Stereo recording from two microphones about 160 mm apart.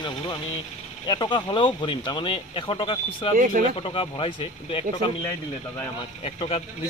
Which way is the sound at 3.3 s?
55° right (ahead or behind).